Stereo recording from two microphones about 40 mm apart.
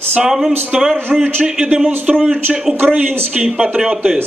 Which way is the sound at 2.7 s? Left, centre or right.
Right.